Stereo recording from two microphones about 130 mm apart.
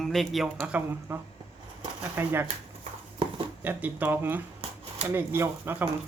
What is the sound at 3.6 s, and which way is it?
Speech, 15° right (ahead or behind).